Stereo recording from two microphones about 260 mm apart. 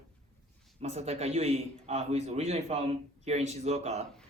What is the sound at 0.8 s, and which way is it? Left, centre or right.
Speech, right.